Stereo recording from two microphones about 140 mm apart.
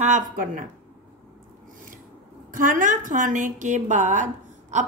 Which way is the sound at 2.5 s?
75° right (ahead or behind).